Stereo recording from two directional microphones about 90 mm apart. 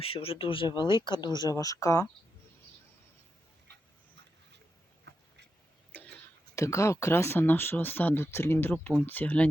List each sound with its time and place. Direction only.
0.0 s speech: 90° left
0.7 s speech: 60° left (ahead or behind)
1.5 s speech: 40° left (ahead or behind)
6.6 s speech: 35° left (ahead or behind); by 9.5 s 15° left (ahead or behind)